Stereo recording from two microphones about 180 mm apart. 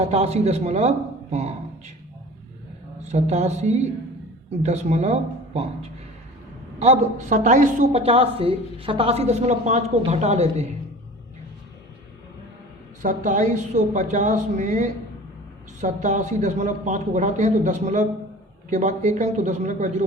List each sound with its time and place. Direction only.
0.0 s speech: 35° right (ahead or behind)
3.0 s speech: 40° right (ahead or behind)
6.7 s a woman's voice: 40° right (ahead or behind)
8.0 s speech: 35° right (ahead or behind)
13.0 s a woman's voice: 45° right (ahead or behind)